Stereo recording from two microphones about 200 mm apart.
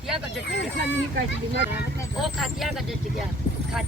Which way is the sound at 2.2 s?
Centre (ahead or behind).